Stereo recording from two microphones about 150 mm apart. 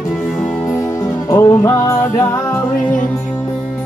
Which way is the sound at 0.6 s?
20° left (ahead or behind).